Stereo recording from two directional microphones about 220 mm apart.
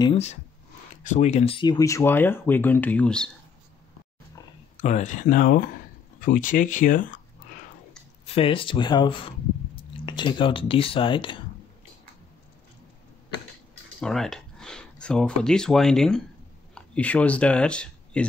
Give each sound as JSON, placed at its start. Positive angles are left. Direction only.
{"t": 0.0, "sound": "speech", "side_deg": 25}
{"t": 4.8, "sound": "speech", "side_deg": 35}
{"t": 8.4, "sound": "speech", "side_deg": 25}
{"t": 13.9, "sound": "speech", "side_deg": 0}